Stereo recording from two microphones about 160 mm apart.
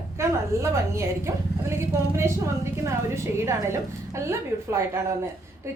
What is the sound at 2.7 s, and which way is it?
Speech, 15° right (ahead or behind).